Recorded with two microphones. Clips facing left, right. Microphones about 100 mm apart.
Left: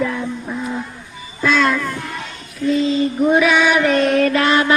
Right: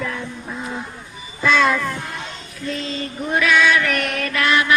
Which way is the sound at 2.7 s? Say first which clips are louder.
Left 11 dB; 5° left (ahead or behind).